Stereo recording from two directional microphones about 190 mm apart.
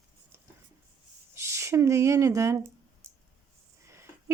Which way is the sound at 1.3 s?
15° right (ahead or behind).